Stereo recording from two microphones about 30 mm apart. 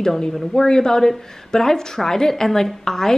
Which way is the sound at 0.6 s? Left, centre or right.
Centre.